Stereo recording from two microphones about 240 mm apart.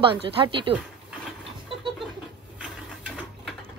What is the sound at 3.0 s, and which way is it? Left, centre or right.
Ratchet, centre.